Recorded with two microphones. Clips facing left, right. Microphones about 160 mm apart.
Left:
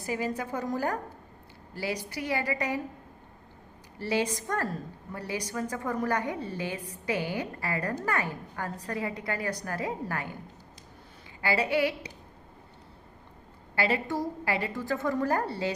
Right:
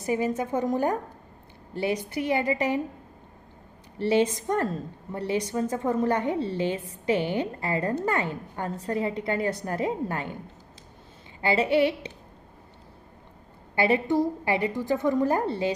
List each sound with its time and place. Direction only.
0.0 s a woman's voice: 20° right (ahead or behind)
3.9 s a woman's voice: 25° right (ahead or behind)
11.3 s a woman's voice: 25° right (ahead or behind)
13.7 s a woman's voice: 20° right (ahead or behind)